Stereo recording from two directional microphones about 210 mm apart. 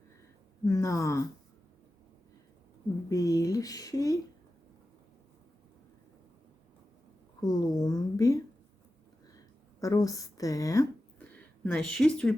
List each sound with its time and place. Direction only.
0.6 s speech: 15° left (ahead or behind)
3.1 s speech: 15° left (ahead or behind)
7.4 s speech: 15° left (ahead or behind)
9.8 s speech: 15° left (ahead or behind)